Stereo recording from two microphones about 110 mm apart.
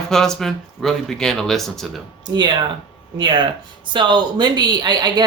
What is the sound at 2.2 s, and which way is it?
Speech, 40° right (ahead or behind).